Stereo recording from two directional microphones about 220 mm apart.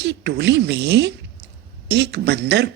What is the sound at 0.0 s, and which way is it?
Speech, 50° right (ahead or behind).